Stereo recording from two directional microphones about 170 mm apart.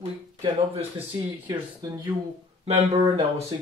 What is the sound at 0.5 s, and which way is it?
Speech, 30° right (ahead or behind).